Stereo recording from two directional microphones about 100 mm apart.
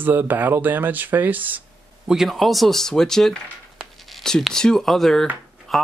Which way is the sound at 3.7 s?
5° left (ahead or behind).